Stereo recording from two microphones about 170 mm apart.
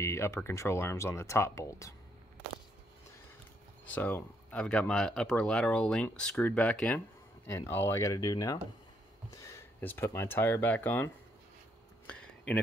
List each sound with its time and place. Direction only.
0.0 s speech: 15° left (ahead or behind)
3.8 s speech: 10° left (ahead or behind)
12.1 s a sound: 5° left (ahead or behind)